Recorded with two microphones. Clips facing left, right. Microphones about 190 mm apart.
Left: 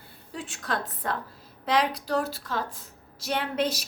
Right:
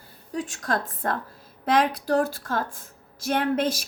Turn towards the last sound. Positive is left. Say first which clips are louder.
# right 4 dB
turn(degrees=-50)  # may be behind; listen again after turning